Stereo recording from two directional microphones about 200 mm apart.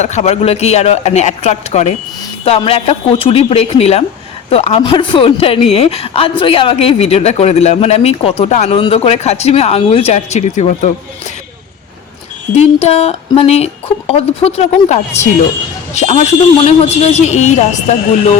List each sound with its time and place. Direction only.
0.0 s a woman's voice: 35° left (ahead or behind)
12.5 s a woman's voice: 30° left (ahead or behind)